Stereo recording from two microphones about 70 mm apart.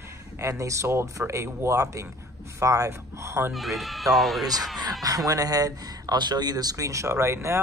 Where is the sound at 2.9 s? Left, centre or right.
Right.